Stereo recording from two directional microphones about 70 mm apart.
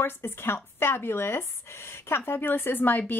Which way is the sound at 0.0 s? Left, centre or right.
Left.